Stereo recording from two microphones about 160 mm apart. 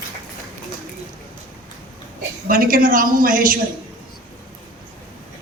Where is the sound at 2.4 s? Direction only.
60° right (ahead or behind).